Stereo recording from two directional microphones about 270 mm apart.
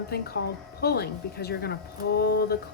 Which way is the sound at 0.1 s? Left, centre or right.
Left.